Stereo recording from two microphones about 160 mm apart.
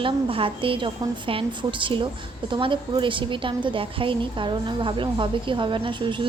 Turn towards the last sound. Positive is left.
turn(degrees=-30)  # may be behind; listen again after turning